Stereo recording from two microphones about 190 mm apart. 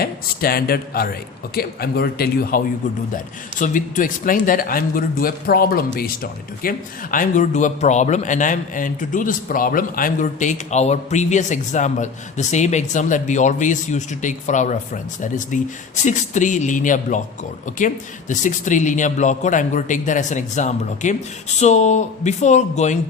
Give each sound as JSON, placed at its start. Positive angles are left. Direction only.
{"t": 0.0, "sound": "speech", "side_deg": 50}
{"t": 3.6, "sound": "a man's voice", "side_deg": 45}